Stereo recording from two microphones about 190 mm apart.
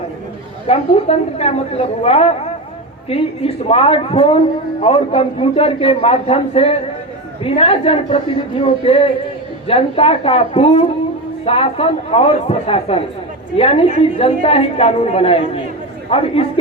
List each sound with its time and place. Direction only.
0.7 s a man's voice: 35° left (ahead or behind)